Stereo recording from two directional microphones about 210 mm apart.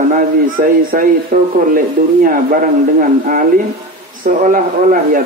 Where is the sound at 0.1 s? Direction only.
40° right (ahead or behind).